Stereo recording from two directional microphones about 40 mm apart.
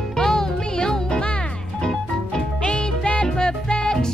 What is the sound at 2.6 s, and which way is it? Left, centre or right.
Music, left.